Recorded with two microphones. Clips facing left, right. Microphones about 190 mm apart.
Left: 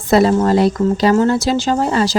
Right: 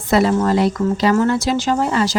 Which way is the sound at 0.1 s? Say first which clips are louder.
Left 3 dB; 35° left (ahead or behind).